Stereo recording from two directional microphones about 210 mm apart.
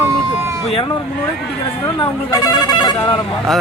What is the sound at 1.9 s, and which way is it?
Speech, 20° left (ahead or behind).